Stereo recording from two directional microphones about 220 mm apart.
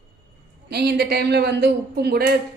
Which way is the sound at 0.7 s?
45° right (ahead or behind).